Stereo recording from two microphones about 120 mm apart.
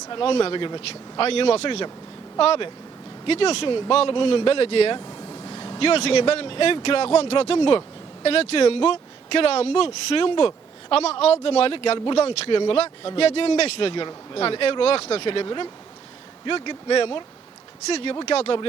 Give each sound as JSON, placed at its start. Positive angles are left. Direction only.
{"t": 0.1, "sound": "speech", "side_deg": 45}
{"t": 4.9, "sound": "vehicle", "side_deg": 30}
{"t": 5.8, "sound": "speech", "side_deg": 55}
{"t": 12.1, "sound": "speech", "side_deg": 55}
{"t": 17.8, "sound": "speech", "side_deg": 60}